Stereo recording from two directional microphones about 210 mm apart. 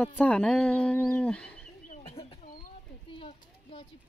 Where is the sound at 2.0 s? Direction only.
25° left (ahead or behind).